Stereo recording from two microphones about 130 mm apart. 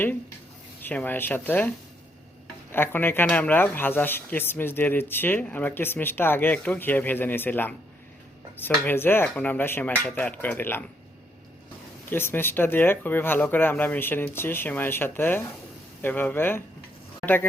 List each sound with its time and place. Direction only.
0.8 s speech: 15° left (ahead or behind)
2.7 s speech: 15° left (ahead or behind)
12.1 s speech: 15° left (ahead or behind)